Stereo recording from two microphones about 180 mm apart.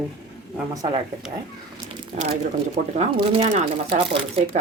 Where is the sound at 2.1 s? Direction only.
40° right (ahead or behind).